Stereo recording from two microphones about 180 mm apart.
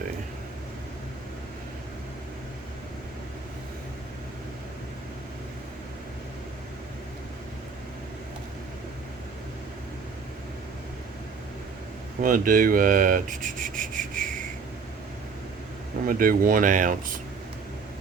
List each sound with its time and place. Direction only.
12.2 s rub: 50° right (ahead or behind)
16.0 s rub: 50° right (ahead or behind)